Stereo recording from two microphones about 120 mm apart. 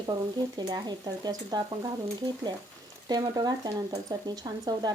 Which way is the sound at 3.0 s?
35° right (ahead or behind).